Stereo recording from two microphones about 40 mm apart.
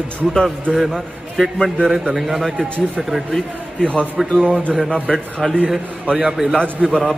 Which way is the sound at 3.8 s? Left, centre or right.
Centre.